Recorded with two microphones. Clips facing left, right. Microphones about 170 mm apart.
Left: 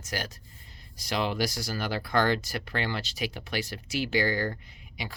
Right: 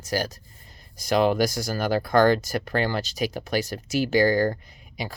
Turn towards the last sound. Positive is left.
turn(degrees=-40)  # may be behind; listen again after turning